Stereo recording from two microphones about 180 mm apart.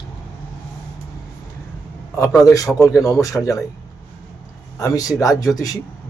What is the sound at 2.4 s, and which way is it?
A man's voice, 20° left (ahead or behind).